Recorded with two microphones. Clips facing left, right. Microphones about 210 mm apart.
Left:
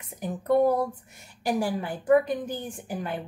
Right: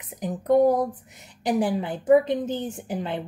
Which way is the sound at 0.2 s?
15° right (ahead or behind).